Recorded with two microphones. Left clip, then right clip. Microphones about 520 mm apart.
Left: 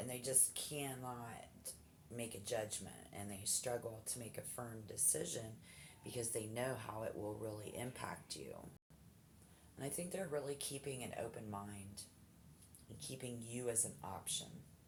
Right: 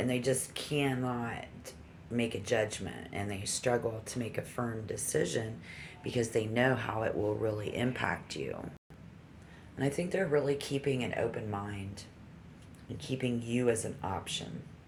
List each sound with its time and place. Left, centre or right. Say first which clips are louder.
0.1 s speech: right 11 dB; left
9.7 s speech: right 13 dB; left
13.0 s speech: right 14 dB; left